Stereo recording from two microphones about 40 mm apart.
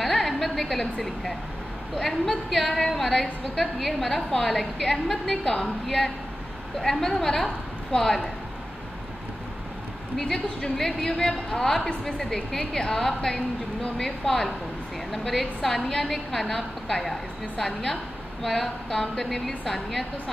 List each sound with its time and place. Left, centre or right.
0.0 s a sound: centre
2.0 s a woman's voice: centre
5.6 s a woman's voice: centre
10.1 s a woman's voice: centre